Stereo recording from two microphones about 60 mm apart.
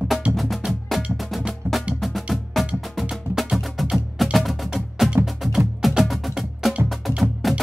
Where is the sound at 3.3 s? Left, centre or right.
Left.